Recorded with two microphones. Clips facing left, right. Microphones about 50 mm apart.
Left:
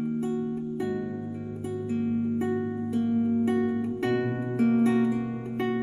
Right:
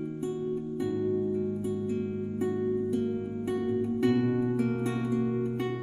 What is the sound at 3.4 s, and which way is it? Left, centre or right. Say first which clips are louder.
Music: left 3 dB; left.